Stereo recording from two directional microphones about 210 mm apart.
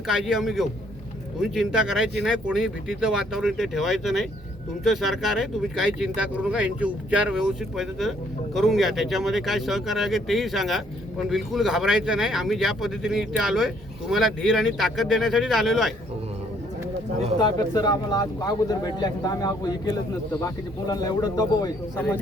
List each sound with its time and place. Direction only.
0.1 s speech: centre (ahead or behind)
17.3 s speech: 20° left (ahead or behind)